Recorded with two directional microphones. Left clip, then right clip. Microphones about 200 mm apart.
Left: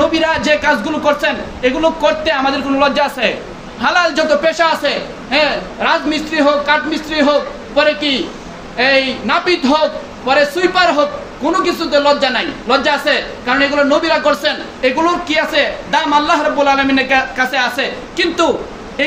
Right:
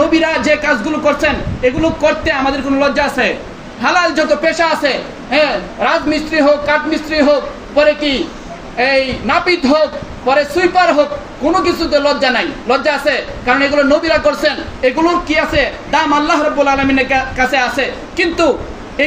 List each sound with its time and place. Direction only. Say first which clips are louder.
0.0 s a man's voice: right 1 dB; 15° left (ahead or behind)